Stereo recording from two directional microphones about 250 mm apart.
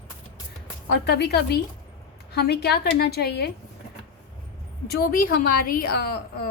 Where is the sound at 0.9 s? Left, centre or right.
Left.